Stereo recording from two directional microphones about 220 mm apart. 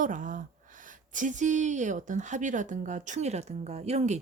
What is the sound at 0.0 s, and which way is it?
Speech, 35° right (ahead or behind).